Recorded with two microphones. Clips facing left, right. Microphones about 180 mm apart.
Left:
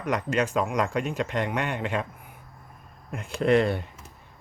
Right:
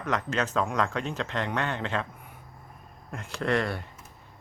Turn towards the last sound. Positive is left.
turn(degrees=20)  # may be behind; listen again after turning